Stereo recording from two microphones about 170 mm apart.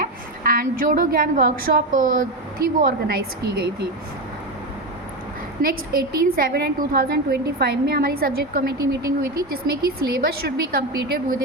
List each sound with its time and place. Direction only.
0.0 s a woman's voice: 60° right (ahead or behind)
5.6 s a woman's voice: 60° right (ahead or behind)